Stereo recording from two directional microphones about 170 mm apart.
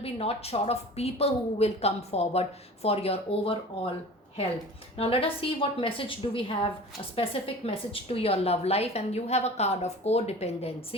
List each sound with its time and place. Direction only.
0.0 s a woman's voice: 35° left (ahead or behind)
4.9 s a woman's voice: 35° left (ahead or behind)